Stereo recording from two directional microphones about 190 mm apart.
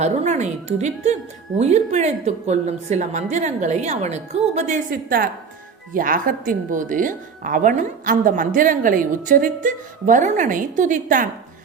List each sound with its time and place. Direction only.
0.0 s speech: 35° right (ahead or behind)